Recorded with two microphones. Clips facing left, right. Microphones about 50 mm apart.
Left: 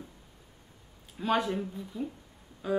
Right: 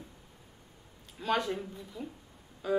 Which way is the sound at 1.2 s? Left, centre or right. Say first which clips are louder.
Left 2 dB; centre.